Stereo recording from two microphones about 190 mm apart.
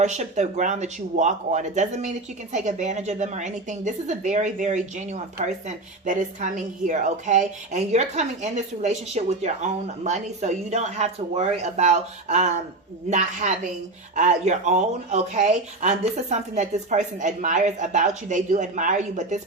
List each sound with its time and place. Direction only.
0.0 s a woman's voice: 40° right (ahead or behind)